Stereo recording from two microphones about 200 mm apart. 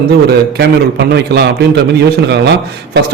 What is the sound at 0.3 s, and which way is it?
A man's voice, 55° right (ahead or behind).